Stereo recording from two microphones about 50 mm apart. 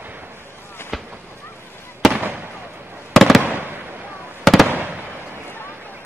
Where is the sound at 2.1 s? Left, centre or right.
Right.